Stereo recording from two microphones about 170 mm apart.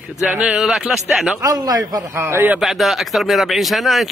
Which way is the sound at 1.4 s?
20° right (ahead or behind).